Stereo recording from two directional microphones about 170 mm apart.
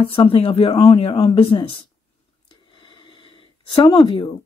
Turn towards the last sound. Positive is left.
turn(degrees=30)  # may be behind; listen again after turning